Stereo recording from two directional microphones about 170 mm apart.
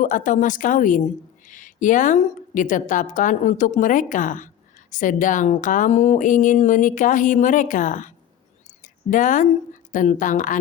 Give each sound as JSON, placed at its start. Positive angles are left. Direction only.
{"t": 0.0, "sound": "a woman's voice", "side_deg": 50}